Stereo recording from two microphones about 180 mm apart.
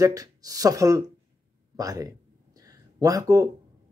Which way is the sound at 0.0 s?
20° right (ahead or behind).